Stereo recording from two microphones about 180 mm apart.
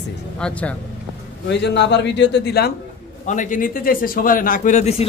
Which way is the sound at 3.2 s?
45° left (ahead or behind).